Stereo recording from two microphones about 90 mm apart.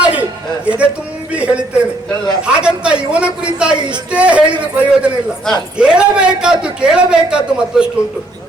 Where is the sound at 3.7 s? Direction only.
55° right (ahead or behind).